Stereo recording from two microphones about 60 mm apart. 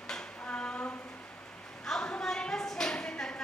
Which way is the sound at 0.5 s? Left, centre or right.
Left.